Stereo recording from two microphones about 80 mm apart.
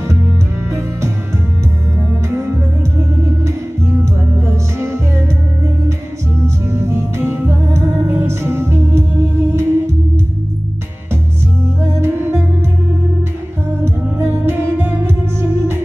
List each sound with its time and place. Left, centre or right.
0.7 s music: right
2.2 s music: right
6.4 s music: right
11.8 s music: right
13.8 s music: right